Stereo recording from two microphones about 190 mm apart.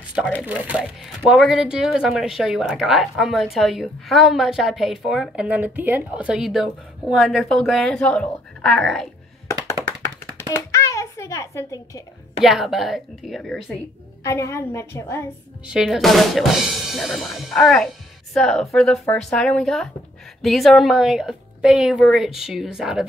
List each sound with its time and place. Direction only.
0.2 s speech: 5° left (ahead or behind)
0.5 s speech: 5° right (ahead or behind)
10.5 s a sound: 15° left (ahead or behind)
12.4 s speech: centre (ahead or behind)
14.2 s a woman's voice: 15° left (ahead or behind)
15.6 s speech: centre (ahead or behind)